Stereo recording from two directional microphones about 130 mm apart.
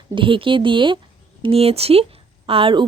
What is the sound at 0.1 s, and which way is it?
Speech, 40° right (ahead or behind).